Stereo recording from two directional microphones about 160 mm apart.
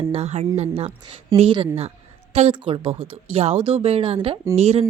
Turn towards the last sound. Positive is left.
turn(degrees=-40)  # may be behind; listen again after turning